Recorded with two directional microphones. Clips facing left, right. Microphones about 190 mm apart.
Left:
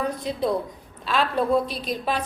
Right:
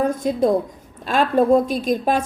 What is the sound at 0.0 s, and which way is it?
A woman's voice, 45° right (ahead or behind).